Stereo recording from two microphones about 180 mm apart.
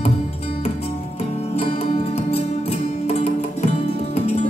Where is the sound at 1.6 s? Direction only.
35° left (ahead or behind).